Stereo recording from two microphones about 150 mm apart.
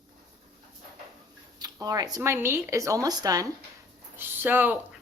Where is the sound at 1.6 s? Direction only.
25° right (ahead or behind).